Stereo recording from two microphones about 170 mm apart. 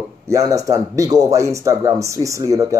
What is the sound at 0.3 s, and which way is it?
Speech, 20° right (ahead or behind).